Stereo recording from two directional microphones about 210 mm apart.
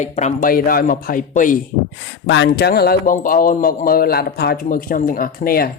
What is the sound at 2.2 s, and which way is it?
Speech, 55° left (ahead or behind).